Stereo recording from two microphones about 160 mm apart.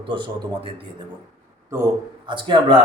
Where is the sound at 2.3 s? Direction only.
30° right (ahead or behind).